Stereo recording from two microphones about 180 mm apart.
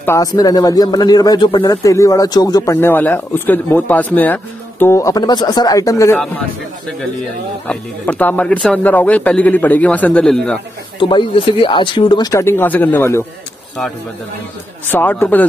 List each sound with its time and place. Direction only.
0.0 s speech: 15° left (ahead or behind)
7.6 s speech: 5° left (ahead or behind)
11.0 s speech: 25° left (ahead or behind)
14.9 s speech: 10° left (ahead or behind)